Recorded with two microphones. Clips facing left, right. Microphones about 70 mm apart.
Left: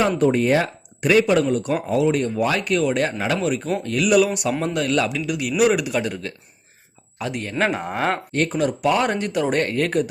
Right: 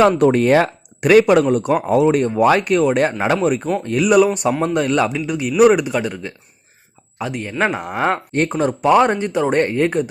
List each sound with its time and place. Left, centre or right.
0.2 s speech: right
5.9 s speech: centre
7.8 s speech: centre
8.3 s speech: right